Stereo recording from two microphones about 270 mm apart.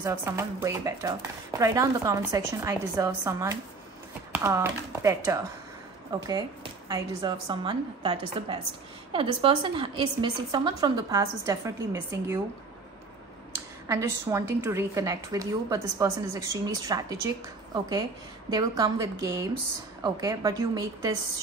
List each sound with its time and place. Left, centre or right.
0.0 s speech: centre
13.8 s speech: centre